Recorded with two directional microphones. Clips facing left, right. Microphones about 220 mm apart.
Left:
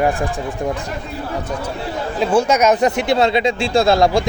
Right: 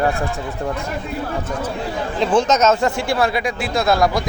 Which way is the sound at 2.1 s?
10° left (ahead or behind).